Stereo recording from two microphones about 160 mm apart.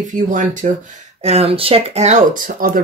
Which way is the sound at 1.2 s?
40° right (ahead or behind).